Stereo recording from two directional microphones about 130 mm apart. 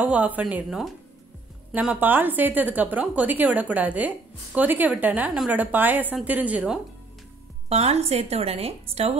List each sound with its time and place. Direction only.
0.0 s a woman's voice: 10° right (ahead or behind)
7.7 s a woman's voice: 50° right (ahead or behind)